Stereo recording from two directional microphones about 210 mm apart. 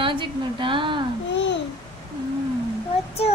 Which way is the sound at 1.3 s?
55° left (ahead or behind).